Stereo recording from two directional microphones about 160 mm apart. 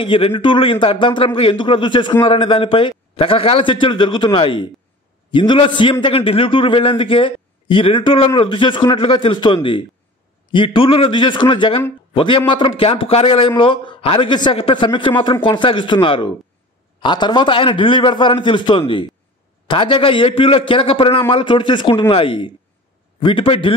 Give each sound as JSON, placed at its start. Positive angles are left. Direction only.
{"t": 0.0, "sound": "a man's voice", "side_deg": 35}